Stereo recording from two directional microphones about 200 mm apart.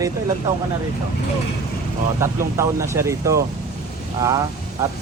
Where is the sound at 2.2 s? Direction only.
15° right (ahead or behind).